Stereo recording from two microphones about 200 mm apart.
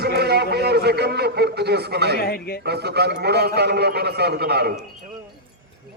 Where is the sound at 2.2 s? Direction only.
50° left (ahead or behind).